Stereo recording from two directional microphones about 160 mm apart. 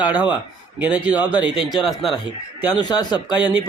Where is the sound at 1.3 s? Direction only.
30° left (ahead or behind).